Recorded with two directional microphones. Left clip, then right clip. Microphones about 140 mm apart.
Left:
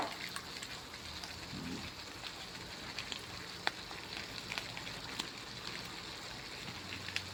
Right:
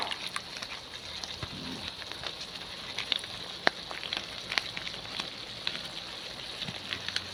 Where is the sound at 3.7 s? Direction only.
55° right (ahead or behind).